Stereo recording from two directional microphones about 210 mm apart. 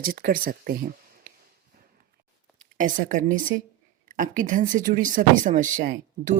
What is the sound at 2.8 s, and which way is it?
Speech, 40° right (ahead or behind).